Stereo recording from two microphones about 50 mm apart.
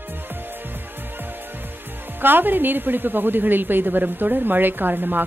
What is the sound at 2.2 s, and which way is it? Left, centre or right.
A woman's voice, right.